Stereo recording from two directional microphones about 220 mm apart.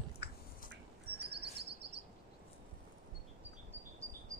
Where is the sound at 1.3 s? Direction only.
50° right (ahead or behind).